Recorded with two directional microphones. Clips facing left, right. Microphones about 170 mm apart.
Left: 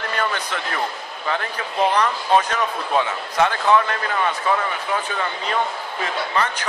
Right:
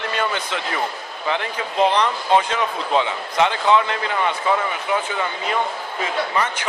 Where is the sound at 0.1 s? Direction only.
20° right (ahead or behind).